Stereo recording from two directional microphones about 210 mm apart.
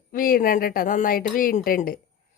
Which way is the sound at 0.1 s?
45° left (ahead or behind).